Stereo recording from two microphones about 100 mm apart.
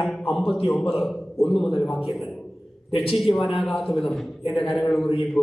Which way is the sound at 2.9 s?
70° left (ahead or behind).